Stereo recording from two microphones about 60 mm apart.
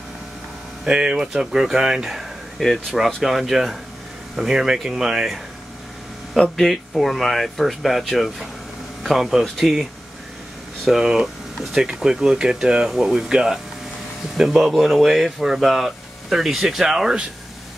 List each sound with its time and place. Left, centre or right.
0.8 s speech: centre
6.5 s speech: centre
10.9 s speech: centre